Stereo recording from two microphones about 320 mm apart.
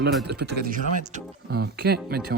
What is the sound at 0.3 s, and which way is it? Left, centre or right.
Speech, right.